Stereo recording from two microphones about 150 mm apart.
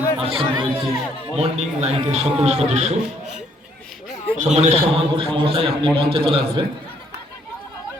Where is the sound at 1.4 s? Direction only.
45° right (ahead or behind).